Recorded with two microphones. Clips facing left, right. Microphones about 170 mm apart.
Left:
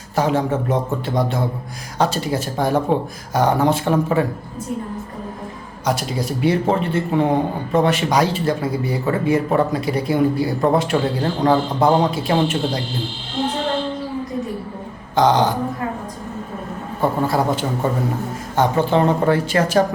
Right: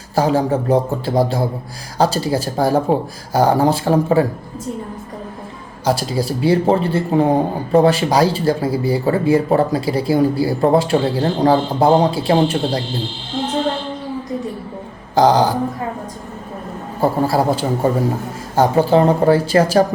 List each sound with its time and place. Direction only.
0.2 s speech: 35° right (ahead or behind)
5.8 s speech: 30° right (ahead or behind)
15.1 s a sound: 35° right (ahead or behind)
17.0 s speech: 35° right (ahead or behind)